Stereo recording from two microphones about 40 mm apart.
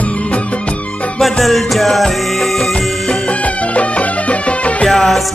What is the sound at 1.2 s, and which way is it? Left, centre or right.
Music, centre.